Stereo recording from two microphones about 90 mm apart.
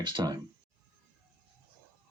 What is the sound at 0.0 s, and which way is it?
Speech, 55° right (ahead or behind).